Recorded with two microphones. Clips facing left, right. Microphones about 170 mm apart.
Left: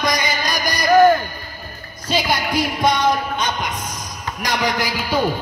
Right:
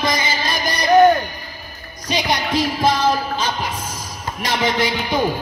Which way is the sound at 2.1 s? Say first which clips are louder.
Even; 20° right (ahead or behind).